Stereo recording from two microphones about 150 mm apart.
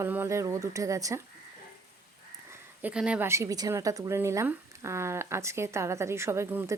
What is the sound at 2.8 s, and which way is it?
Speech, 5° right (ahead or behind).